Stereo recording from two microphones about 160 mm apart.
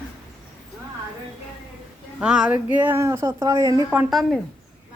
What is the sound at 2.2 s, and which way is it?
Speech, 5° right (ahead or behind).